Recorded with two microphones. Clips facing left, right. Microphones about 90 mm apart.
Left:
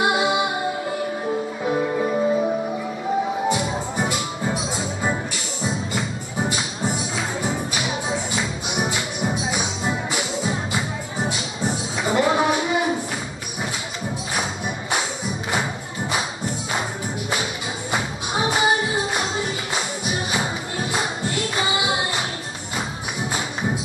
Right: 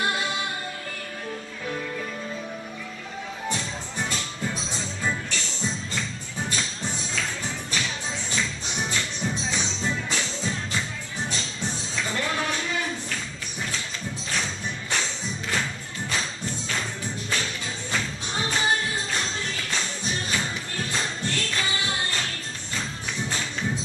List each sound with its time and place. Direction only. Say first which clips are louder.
0.0 s music: left 8 dB; 15° left (ahead or behind); by 2.5 s 35° left (ahead or behind)
3.4 s music: left 9 dB; 15° left (ahead or behind)
14.9 s music: left 4 dB; 15° left (ahead or behind)
17.9 s music: left 5 dB; 15° left (ahead or behind)
23.3 s music: left 5 dB; 15° left (ahead or behind)